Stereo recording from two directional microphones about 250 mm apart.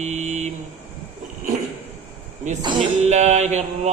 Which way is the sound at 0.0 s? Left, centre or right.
Right.